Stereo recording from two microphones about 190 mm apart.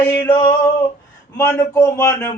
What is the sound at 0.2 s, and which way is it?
A man's voice, 15° left (ahead or behind).